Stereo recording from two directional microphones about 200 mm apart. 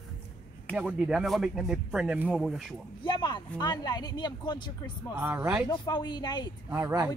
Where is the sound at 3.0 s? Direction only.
20° left (ahead or behind).